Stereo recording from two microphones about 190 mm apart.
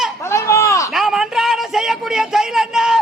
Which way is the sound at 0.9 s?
Centre (ahead or behind).